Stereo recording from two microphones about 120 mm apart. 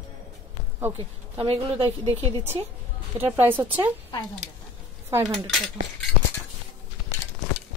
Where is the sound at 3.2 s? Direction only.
15° right (ahead or behind).